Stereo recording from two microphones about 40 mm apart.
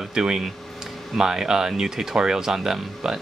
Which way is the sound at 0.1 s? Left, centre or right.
Centre.